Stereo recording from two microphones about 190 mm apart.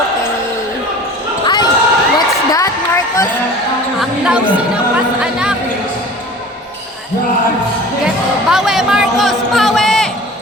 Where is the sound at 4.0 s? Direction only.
5° right (ahead or behind).